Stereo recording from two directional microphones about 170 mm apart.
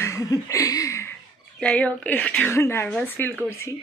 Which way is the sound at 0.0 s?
20° left (ahead or behind).